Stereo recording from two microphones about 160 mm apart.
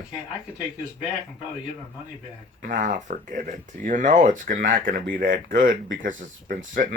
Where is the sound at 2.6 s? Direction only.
55° right (ahead or behind).